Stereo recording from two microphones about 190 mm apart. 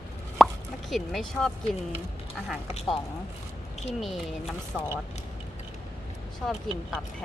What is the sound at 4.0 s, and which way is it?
Speech, centre (ahead or behind).